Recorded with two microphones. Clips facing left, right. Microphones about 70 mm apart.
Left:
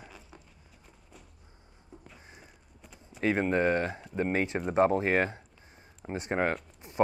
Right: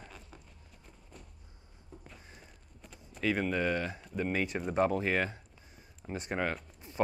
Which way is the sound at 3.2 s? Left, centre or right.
Left.